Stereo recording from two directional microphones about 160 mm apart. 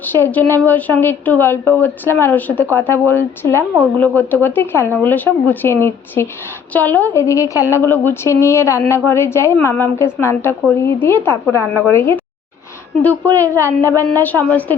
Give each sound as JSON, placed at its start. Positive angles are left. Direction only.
{"t": 0.0, "sound": "a woman's voice", "side_deg": 10}